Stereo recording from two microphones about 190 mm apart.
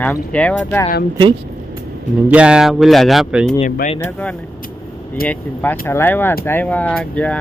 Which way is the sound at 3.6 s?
45° left (ahead or behind).